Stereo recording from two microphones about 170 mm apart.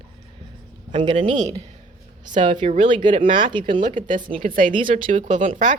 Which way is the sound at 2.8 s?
30° right (ahead or behind).